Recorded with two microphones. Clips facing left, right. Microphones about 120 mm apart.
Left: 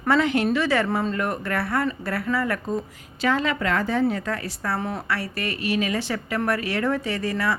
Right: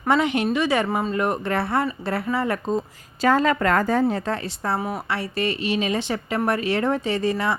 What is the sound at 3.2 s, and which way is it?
A woman's voice, 40° right (ahead or behind).